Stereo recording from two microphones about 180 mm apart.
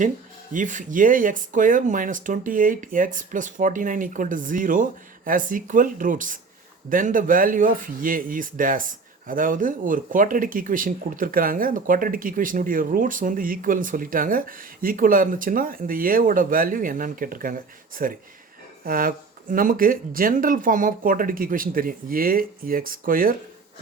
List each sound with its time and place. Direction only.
0.5 s speech: 45° right (ahead or behind)